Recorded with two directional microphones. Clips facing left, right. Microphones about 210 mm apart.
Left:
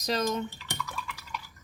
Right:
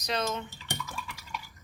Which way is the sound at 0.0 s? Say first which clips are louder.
Left 3 dB; 40° left (ahead or behind).